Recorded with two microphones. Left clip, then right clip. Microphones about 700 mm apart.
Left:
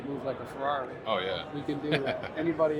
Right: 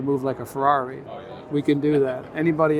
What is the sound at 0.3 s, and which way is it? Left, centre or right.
Speech, right.